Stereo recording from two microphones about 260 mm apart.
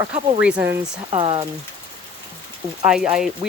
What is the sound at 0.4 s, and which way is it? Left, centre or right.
Speech, centre.